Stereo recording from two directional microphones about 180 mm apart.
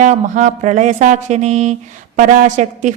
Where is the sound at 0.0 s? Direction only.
40° right (ahead or behind).